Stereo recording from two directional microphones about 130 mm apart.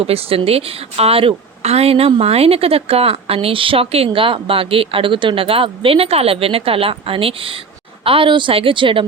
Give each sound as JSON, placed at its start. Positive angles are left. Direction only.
{"t": 0.1, "sound": "a woman's voice", "side_deg": -50}